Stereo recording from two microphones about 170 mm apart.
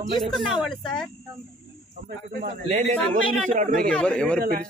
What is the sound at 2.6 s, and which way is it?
A man's voice, 40° right (ahead or behind).